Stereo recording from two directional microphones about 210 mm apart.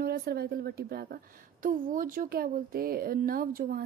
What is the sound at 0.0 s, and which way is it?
A woman's voice, 45° right (ahead or behind).